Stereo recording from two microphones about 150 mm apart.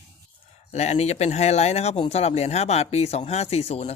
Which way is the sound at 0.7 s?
45° left (ahead or behind).